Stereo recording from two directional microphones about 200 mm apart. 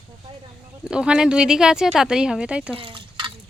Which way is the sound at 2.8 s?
25° right (ahead or behind).